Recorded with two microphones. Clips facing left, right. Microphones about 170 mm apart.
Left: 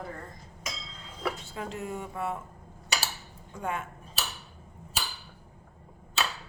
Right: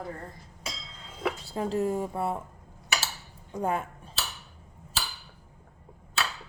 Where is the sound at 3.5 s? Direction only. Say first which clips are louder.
Right 5 dB; 35° right (ahead or behind).